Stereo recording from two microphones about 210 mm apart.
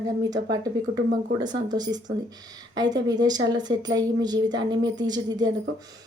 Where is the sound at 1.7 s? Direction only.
20° right (ahead or behind).